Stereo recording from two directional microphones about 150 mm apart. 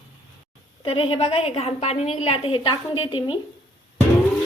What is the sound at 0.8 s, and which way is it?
A woman's voice, 40° left (ahead or behind).